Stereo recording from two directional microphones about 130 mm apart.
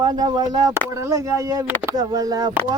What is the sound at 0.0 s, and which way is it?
Speech, 30° right (ahead or behind).